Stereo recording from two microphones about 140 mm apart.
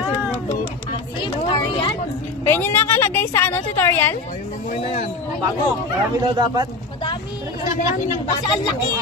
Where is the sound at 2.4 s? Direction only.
15° left (ahead or behind).